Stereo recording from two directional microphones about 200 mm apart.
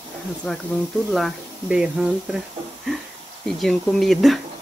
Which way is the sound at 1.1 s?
Centre (ahead or behind).